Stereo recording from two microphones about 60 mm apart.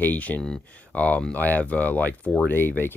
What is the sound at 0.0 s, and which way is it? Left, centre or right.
Speech, left.